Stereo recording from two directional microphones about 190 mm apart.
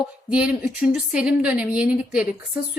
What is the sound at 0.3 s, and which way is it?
A woman's voice, 5° right (ahead or behind).